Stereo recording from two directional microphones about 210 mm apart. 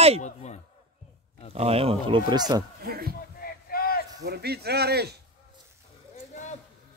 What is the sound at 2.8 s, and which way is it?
Speech, 45° right (ahead or behind).